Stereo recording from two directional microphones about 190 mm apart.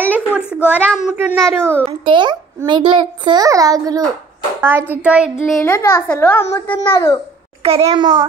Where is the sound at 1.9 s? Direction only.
25° right (ahead or behind); by 5.3 s 5° right (ahead or behind).